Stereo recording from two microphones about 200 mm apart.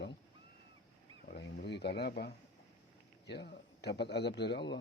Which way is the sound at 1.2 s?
50° left (ahead or behind).